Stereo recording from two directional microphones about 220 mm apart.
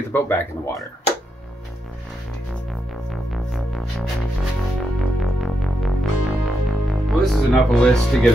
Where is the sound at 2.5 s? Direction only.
Centre (ahead or behind).